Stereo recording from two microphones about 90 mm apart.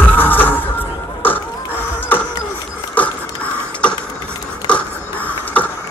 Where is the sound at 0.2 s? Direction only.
20° left (ahead or behind).